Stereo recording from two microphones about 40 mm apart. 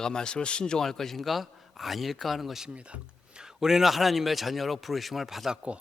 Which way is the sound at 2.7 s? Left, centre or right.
Right.